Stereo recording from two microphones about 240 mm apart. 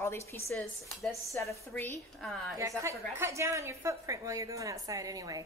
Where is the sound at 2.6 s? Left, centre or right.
Centre.